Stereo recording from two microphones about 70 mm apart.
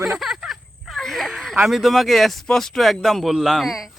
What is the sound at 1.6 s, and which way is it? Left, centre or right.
Speech, centre.